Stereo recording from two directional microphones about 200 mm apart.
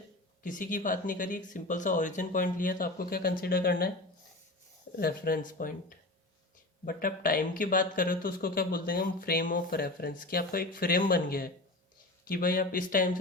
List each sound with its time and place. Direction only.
0.4 s speech: 40° left (ahead or behind)
4.9 s speech: 50° left (ahead or behind)
6.8 s speech: 45° left (ahead or behind)